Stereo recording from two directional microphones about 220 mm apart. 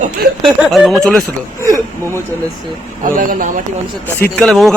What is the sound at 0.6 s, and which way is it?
Speech, centre (ahead or behind).